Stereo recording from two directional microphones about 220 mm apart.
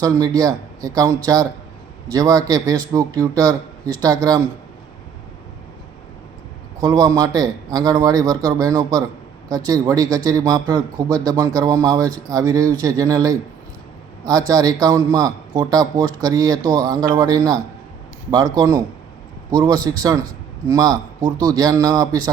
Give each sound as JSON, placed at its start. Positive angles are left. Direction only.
{"t": 0.0, "sound": "a man's voice", "side_deg": -15}
{"t": 6.7, "sound": "a man's voice", "side_deg": -15}